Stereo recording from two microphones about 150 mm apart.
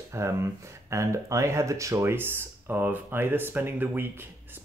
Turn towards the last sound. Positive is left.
turn(degrees=-15)  # may be behind; listen again after turning